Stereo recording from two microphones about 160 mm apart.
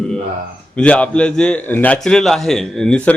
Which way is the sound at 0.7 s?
10° left (ahead or behind).